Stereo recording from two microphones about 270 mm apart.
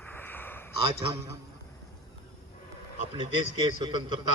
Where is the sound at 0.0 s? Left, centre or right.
Centre.